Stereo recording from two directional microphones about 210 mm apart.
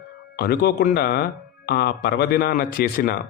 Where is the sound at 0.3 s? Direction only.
50° left (ahead or behind).